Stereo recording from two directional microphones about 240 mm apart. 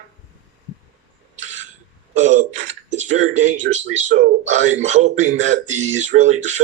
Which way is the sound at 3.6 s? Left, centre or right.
Right.